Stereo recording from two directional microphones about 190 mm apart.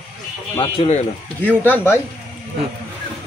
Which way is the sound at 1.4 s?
10° left (ahead or behind).